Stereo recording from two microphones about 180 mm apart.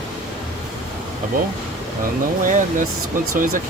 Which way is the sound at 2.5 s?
45° right (ahead or behind).